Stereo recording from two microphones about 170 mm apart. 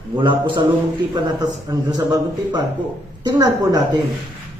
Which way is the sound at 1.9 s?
25° right (ahead or behind).